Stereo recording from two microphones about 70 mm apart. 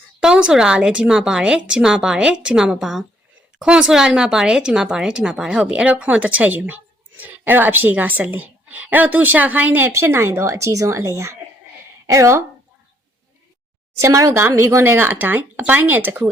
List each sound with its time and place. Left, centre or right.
0.2 s a woman's voice: centre; by 9.9 s right
9.9 s speech: right
14.0 s speech: right
14.3 s a woman's voice: right